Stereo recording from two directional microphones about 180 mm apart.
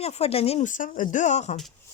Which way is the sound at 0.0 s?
35° left (ahead or behind).